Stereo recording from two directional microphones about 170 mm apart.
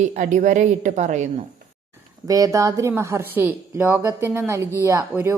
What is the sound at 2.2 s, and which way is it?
Speech, 20° right (ahead or behind).